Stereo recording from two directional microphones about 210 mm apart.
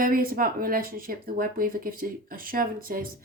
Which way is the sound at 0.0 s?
45° right (ahead or behind).